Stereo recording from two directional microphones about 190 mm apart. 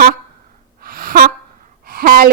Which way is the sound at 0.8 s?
50° right (ahead or behind).